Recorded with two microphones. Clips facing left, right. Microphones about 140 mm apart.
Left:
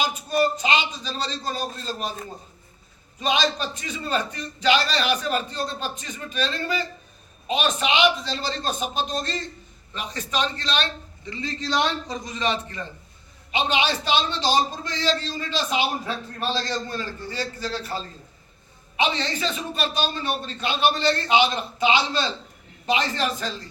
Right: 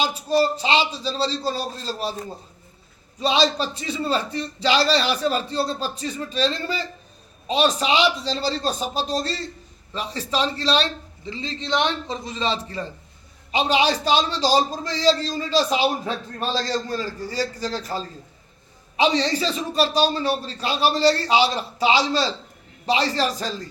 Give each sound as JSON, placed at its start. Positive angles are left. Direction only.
{"t": 0.0, "sound": "a man's voice", "side_deg": -30}
{"t": 3.2, "sound": "a man's voice", "side_deg": -30}